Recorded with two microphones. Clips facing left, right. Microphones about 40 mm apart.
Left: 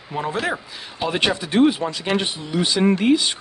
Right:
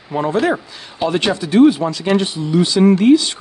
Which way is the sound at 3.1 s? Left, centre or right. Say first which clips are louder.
Right 6 dB; left.